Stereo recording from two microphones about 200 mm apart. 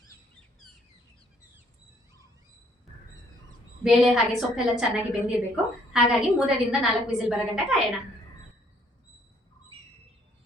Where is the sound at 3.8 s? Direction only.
Centre (ahead or behind).